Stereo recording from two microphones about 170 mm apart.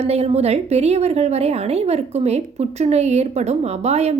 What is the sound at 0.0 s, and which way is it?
A woman's voice, 35° right (ahead or behind).